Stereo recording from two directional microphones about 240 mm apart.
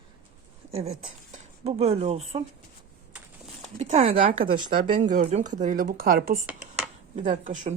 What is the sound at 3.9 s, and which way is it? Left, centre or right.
A woman's voice, right.